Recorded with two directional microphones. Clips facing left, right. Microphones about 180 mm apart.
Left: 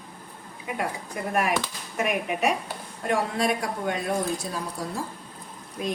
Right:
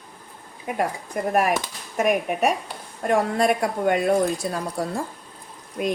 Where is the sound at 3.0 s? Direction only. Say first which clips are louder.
Right 5 dB; 50° right (ahead or behind).